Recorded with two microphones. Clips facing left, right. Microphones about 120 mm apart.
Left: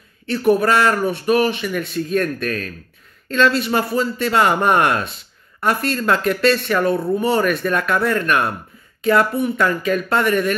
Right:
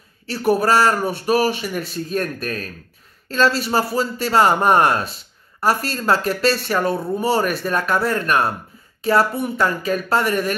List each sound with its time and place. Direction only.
0.3 s a man's voice: 30° right (ahead or behind)